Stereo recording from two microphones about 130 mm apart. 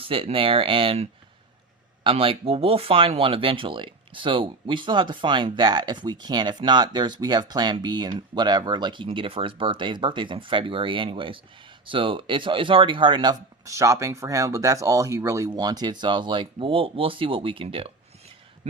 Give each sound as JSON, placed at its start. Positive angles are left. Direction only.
{"t": 0.0, "sound": "speech", "side_deg": -45}
{"t": 2.0, "sound": "speech", "side_deg": -45}
{"t": 13.7, "sound": "speech", "side_deg": -25}
{"t": 18.6, "sound": "heart sounds", "side_deg": -55}